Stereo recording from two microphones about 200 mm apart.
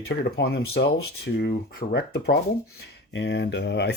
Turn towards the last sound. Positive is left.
turn(degrees=60)  # may be behind; listen again after turning